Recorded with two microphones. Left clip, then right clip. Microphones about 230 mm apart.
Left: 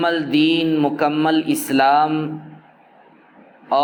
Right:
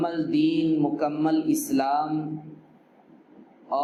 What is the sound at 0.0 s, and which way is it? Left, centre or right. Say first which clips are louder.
A man's voice: left 7 dB; left.